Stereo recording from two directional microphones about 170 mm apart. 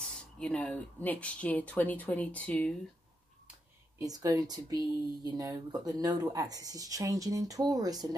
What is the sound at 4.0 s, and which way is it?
Speech, 20° right (ahead or behind).